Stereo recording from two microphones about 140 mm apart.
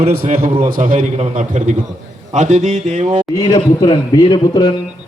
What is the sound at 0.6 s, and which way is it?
A man's voice, 75° right (ahead or behind).